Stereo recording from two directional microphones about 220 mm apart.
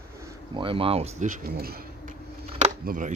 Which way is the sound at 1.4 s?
45° right (ahead or behind).